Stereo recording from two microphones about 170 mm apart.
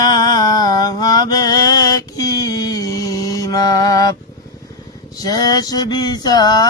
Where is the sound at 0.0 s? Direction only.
25° left (ahead or behind).